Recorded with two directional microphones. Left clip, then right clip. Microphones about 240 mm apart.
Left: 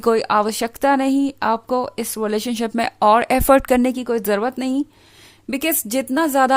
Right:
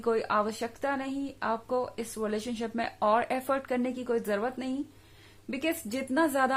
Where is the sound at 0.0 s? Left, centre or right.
Left.